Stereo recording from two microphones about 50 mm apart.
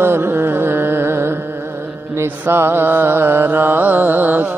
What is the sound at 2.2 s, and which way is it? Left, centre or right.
Mantra, right.